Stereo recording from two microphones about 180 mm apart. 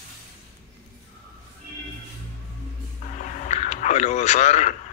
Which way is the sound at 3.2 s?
40° left (ahead or behind).